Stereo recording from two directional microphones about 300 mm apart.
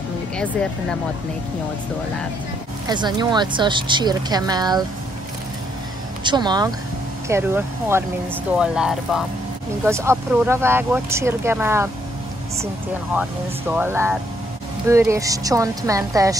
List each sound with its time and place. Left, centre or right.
0.4 s speech: centre
2.9 s speech: centre
6.2 s speech: centre
13.1 s speech: centre